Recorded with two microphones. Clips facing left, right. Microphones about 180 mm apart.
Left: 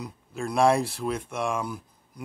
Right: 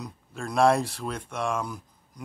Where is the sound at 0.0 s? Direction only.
5° left (ahead or behind).